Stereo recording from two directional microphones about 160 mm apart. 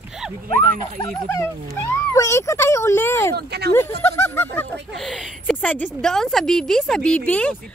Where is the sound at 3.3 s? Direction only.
90° right.